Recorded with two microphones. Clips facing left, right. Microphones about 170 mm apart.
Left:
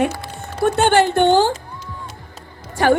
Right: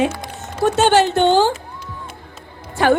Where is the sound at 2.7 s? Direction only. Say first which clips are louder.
Even; 45° left (ahead or behind).